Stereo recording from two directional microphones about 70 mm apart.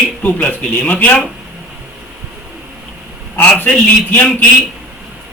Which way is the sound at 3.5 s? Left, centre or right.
Left.